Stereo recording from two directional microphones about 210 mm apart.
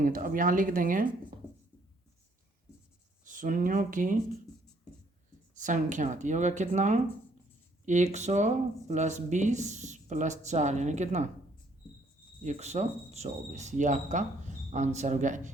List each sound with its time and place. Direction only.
0.0 s speech: 40° right (ahead or behind)
3.2 s speech: 40° right (ahead or behind)
5.5 s speech: 35° right (ahead or behind)
12.4 s speech: 30° right (ahead or behind)